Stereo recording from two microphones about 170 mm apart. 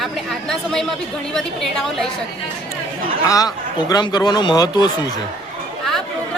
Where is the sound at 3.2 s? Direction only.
20° left (ahead or behind).